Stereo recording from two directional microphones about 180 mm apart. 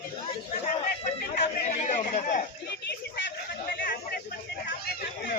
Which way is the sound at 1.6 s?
40° left (ahead or behind).